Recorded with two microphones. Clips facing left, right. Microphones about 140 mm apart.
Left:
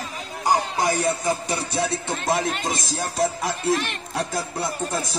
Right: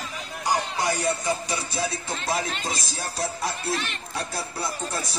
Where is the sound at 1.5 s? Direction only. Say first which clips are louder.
Left 4 dB; 70° left (ahead or behind).